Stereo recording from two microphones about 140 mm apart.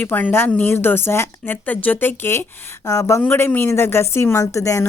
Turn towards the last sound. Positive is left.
turn(degrees=20)  # may be behind; listen again after turning